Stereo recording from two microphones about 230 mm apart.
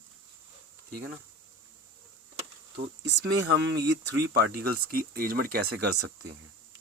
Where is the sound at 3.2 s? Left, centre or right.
Right.